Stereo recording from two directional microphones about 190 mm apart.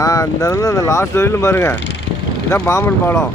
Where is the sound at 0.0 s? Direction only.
20° left (ahead or behind).